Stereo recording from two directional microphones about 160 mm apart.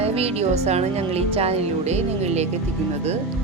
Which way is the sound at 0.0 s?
40° right (ahead or behind).